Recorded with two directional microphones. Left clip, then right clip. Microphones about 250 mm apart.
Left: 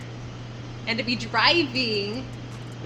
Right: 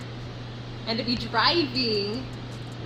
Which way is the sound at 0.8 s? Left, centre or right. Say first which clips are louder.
Left 2 dB; centre.